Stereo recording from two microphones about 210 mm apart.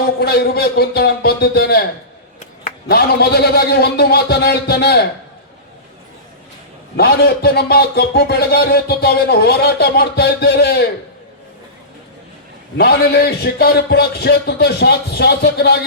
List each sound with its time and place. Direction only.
0.2 s speech: 50° left (ahead or behind)
6.9 s speech: 50° left (ahead or behind)
12.7 s speech: 50° left (ahead or behind)